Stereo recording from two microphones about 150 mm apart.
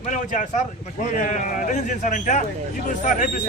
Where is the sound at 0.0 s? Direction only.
55° left (ahead or behind).